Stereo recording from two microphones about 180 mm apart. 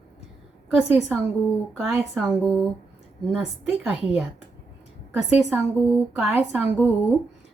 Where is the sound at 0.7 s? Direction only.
10° right (ahead or behind).